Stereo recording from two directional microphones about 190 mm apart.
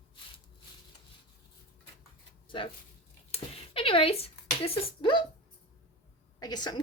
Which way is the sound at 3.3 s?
30° left (ahead or behind).